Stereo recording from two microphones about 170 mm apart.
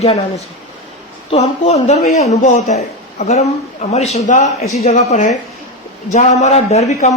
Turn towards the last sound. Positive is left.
turn(degrees=40)  # may be behind; listen again after turning